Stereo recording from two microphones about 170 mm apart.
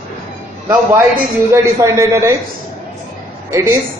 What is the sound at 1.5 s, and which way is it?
Speech, 20° right (ahead or behind).